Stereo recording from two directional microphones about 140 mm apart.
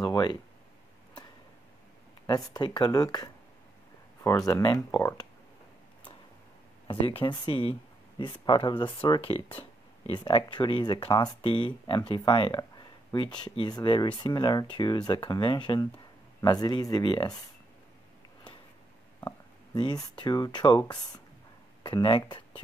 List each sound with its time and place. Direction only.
0.0 s speech: 30° left (ahead or behind)
2.2 s speech: 30° left (ahead or behind)
6.9 s speech: 40° left (ahead or behind)
19.2 s speech: 30° left (ahead or behind)